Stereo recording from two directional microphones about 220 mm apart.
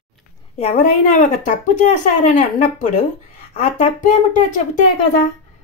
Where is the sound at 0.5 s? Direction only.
30° left (ahead or behind).